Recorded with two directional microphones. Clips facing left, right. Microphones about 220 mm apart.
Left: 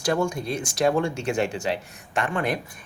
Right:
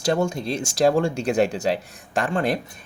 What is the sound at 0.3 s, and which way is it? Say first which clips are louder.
Speech: right 2 dB; 25° right (ahead or behind).